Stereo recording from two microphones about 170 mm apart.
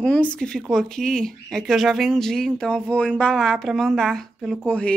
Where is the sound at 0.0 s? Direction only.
5° left (ahead or behind).